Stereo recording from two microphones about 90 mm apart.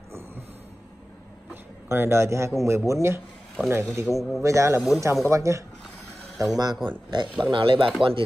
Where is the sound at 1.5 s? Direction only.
25° right (ahead or behind).